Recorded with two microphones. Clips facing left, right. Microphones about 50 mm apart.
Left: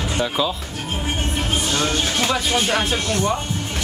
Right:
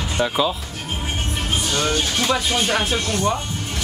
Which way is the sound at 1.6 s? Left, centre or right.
Left.